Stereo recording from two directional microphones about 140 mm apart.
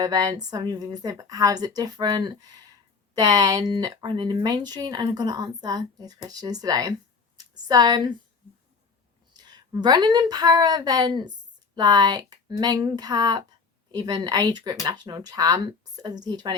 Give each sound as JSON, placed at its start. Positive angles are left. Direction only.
{"t": 0.0, "sound": "a woman's voice", "side_deg": -25}
{"t": 9.3, "sound": "a woman's voice", "side_deg": -30}